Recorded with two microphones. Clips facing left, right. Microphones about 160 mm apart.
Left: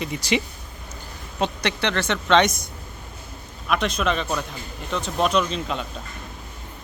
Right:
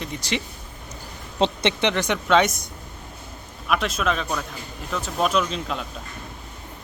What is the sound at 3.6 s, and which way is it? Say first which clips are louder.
Speech: left 1 dB; 5° right (ahead or behind).